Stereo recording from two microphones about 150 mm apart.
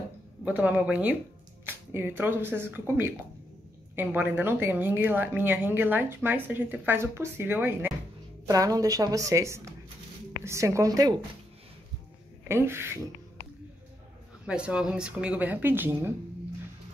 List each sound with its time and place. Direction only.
0.5 s a woman's voice: 10° right (ahead or behind)
8.5 s speech: 20° right (ahead or behind)
12.4 s a woman's voice: 15° right (ahead or behind)
14.4 s a woman's voice: 5° right (ahead or behind)